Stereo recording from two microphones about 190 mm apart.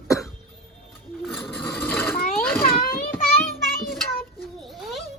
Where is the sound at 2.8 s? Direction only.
50° left (ahead or behind).